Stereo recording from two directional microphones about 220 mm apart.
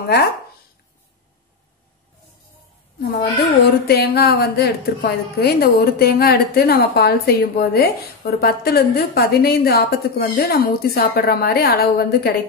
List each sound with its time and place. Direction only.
3.0 s a woman's voice: 50° left (ahead or behind)